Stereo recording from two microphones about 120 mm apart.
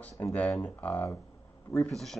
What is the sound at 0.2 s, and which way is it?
Speech, 10° left (ahead or behind).